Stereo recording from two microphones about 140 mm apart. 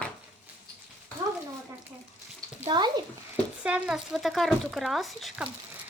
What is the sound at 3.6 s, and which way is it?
Speech, 10° right (ahead or behind).